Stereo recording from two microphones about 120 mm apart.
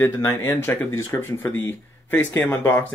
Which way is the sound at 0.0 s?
20° left (ahead or behind).